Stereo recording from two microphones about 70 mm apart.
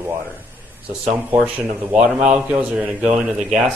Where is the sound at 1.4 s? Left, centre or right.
Centre.